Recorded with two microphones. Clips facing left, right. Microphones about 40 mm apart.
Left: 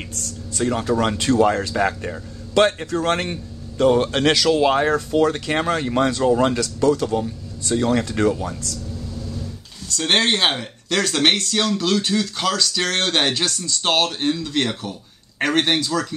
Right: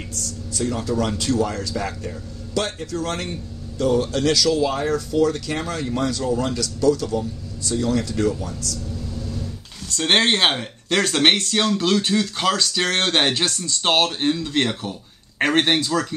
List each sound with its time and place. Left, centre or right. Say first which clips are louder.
0.6 s a man's voice: left 3 dB; left
4.6 s speech: left 4 dB; left
8.3 s speech: left 3 dB; left
9.9 s speech: right 1 dB; right